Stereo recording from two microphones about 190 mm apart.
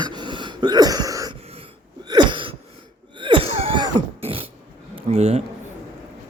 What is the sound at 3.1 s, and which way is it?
Throat clearing, 25° right (ahead or behind).